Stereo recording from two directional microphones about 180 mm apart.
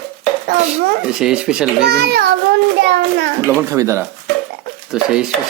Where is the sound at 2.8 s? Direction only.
75° right (ahead or behind).